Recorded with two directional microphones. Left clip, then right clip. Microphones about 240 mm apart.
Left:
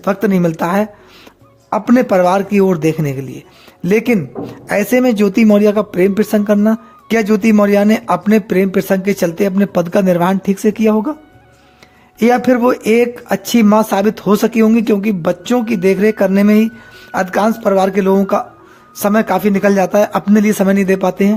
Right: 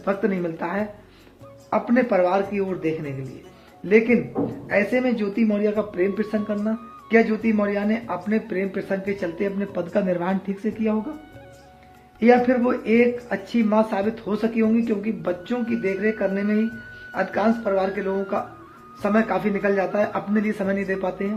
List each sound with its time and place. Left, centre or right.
0.0 s speech: left
12.2 s speech: left